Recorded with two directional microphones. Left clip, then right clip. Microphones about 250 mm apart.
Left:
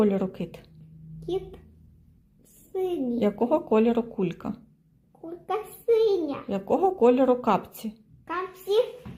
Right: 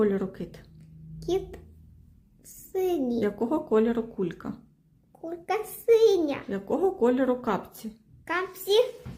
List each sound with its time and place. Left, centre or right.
0.0 s speech: centre
2.7 s a woman's voice: centre
3.2 s speech: centre
5.2 s a child's voice: centre
6.5 s speech: centre
8.2 s a child's voice: centre